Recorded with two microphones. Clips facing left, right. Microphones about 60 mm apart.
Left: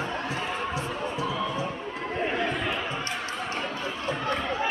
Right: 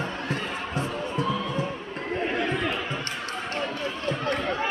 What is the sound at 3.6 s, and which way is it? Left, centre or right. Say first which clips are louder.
Run: right 2 dB; left.